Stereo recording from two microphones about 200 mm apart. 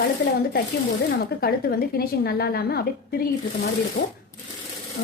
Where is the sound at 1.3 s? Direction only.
50° left (ahead or behind).